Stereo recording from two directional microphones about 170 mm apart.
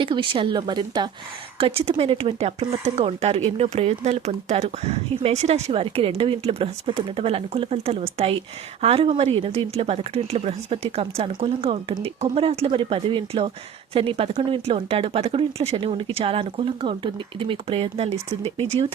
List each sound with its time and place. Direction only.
0.0 s speech: 30° right (ahead or behind)